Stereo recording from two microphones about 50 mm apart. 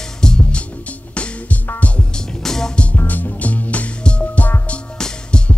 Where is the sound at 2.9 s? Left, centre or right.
Left; by 5.5 s centre.